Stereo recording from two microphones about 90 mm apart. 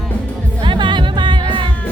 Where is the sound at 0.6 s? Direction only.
65° right (ahead or behind).